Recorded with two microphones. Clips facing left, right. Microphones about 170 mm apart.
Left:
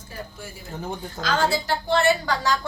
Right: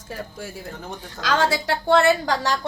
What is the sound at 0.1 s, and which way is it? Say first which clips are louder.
A woman's voice: right 5 dB; 90° right.